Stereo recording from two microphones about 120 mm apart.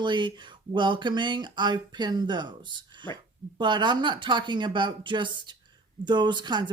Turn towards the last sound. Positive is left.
turn(degrees=-40)  # may be behind; listen again after turning